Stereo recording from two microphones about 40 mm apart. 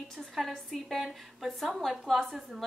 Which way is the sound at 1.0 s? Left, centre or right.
Centre.